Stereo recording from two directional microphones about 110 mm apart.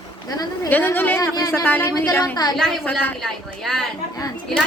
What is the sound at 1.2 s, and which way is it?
Speech, 30° left (ahead or behind).